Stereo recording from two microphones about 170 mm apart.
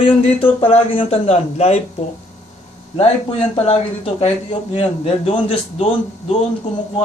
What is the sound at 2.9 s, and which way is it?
A man's voice, 35° left (ahead or behind).